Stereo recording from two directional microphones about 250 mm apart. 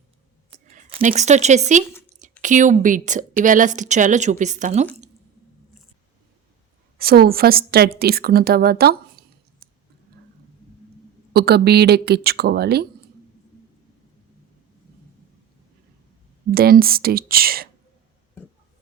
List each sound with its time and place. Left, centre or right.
0.7 s a woman's voice: right
7.0 s a woman's voice: right
11.3 s a woman's voice: right
16.5 s a woman's voice: right